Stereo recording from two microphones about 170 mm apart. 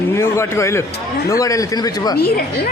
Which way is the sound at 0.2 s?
15° left (ahead or behind).